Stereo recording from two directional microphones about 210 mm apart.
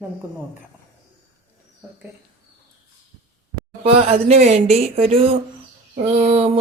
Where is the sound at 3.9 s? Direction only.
30° right (ahead or behind).